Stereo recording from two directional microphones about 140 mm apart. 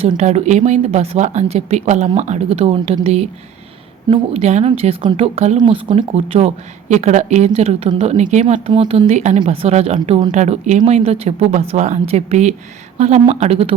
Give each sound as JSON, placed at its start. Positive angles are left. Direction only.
{"t": 0.2, "sound": "speech", "side_deg": -55}
{"t": 5.5, "sound": "speech", "side_deg": -35}
{"t": 8.7, "sound": "speech", "side_deg": -35}
{"t": 9.0, "sound": "speech", "side_deg": -55}